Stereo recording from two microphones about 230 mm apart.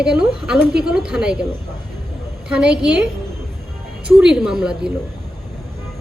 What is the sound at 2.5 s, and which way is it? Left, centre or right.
Speech, centre.